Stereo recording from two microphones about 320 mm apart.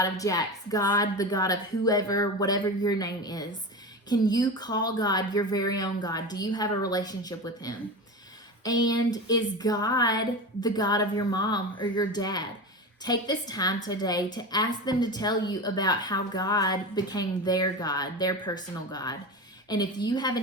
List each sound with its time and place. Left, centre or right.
0.0 s a woman's voice: centre